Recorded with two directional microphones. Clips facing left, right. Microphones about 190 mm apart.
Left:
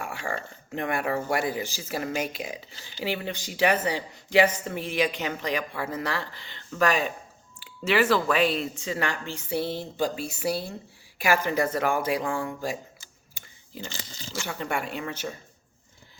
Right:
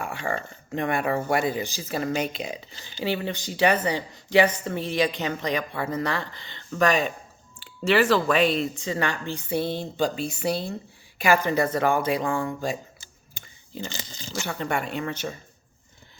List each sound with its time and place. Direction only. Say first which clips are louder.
0.0 s speech: right 3 dB; 10° left (ahead or behind)
9.5 s speech: right 2 dB; 20° right (ahead or behind)
10.0 s speech: right 2 dB; 5° left (ahead or behind)
13.3 s a sound: right 4 dB; 5° left (ahead or behind)
14.1 s a sound: right 2 dB; 20° right (ahead or behind)
14.4 s speech: right 2 dB; 5° left (ahead or behind)